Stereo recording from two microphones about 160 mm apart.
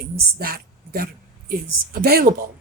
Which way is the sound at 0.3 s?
75° right (ahead or behind).